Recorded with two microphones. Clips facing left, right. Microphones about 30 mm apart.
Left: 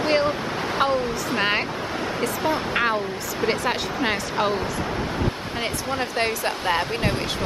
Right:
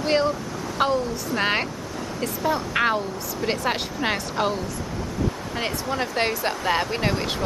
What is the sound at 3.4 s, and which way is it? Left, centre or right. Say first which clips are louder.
Speech: left 3 dB; left.